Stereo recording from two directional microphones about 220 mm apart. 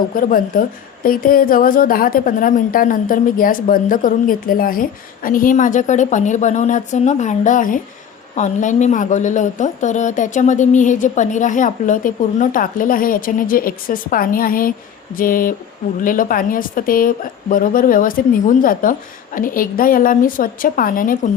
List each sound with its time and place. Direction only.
0.2 s a woman's voice: 40° left (ahead or behind)